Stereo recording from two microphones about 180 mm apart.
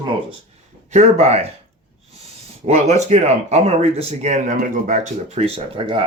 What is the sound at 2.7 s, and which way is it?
Speech, 35° right (ahead or behind).